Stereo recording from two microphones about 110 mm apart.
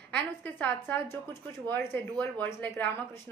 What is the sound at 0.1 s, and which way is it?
A woman's voice, 15° left (ahead or behind).